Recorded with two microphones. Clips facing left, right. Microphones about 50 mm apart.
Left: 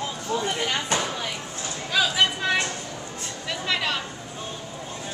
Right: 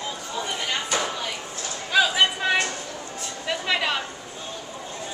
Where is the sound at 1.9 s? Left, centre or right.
Centre.